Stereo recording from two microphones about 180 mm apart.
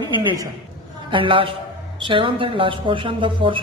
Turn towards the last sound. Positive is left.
turn(degrees=-30)  # may be behind; listen again after turning